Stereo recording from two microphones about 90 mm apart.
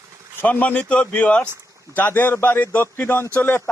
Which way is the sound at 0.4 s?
20° left (ahead or behind).